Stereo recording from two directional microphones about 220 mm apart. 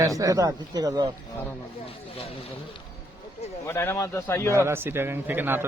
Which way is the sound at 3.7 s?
10° left (ahead or behind).